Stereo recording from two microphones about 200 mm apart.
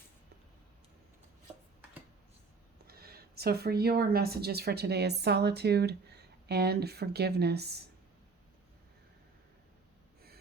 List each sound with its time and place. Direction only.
2.8 s speech: 50° right (ahead or behind)